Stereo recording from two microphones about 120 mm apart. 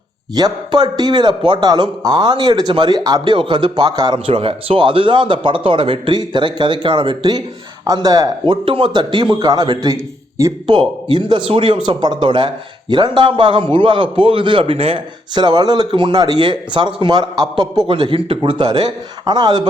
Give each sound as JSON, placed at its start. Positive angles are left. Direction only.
{"t": 0.3, "sound": "a man's voice", "side_deg": -35}
{"t": 4.3, "sound": "a man's voice", "side_deg": -50}
{"t": 8.6, "sound": "a man's voice", "side_deg": -45}
{"t": 10.7, "sound": "a man's voice", "side_deg": -40}
{"t": 15.4, "sound": "a man's voice", "side_deg": -35}